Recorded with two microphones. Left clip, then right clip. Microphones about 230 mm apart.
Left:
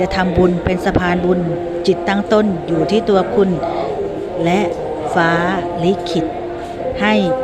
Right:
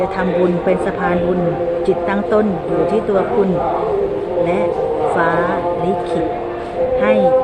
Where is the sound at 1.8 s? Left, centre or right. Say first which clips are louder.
Even; left.